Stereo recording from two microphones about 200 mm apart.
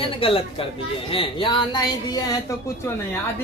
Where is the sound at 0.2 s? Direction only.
25° left (ahead or behind).